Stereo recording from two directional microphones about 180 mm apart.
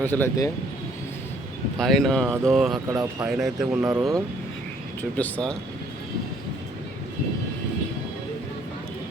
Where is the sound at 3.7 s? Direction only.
15° right (ahead or behind).